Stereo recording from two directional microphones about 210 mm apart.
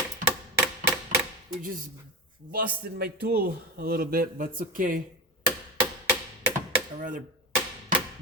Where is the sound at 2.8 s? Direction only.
50° right (ahead or behind).